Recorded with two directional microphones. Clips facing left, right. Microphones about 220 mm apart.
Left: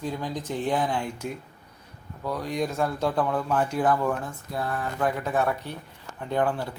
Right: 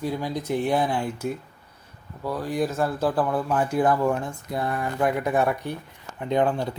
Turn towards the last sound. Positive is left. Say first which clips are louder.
# right 3 dB
turn(degrees=-20)  # may be behind; listen again after turning